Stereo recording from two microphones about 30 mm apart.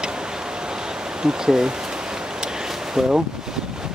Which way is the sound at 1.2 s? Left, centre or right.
Right.